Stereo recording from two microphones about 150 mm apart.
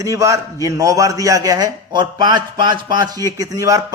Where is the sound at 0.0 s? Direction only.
20° right (ahead or behind).